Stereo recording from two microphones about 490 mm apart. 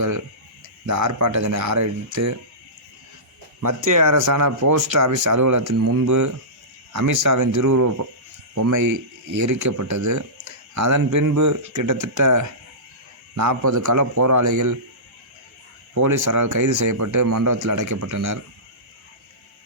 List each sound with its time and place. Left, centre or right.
0.9 s speech: right
3.8 s speech: right
16.0 s speech: right